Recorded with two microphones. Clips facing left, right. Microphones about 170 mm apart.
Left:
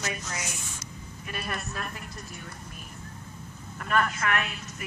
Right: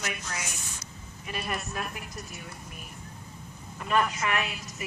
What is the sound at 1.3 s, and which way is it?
Speech, 5° right (ahead or behind).